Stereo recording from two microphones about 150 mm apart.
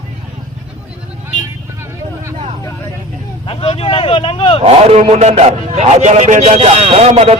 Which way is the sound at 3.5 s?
40° left (ahead or behind).